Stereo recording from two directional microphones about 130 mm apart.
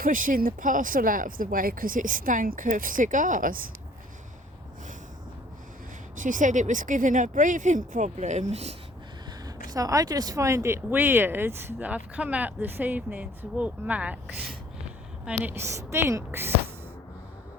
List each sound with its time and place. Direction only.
0.0 s speech: 90° right
6.1 s speech: 90° right; by 8.7 s 60° right (ahead or behind)
9.5 s a woman's voice: 30° right (ahead or behind); by 15.5 s 10° right (ahead or behind)
15.5 s speech: 20° right (ahead or behind)